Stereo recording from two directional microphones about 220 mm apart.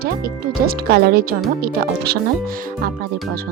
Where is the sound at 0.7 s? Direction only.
45° right (ahead or behind).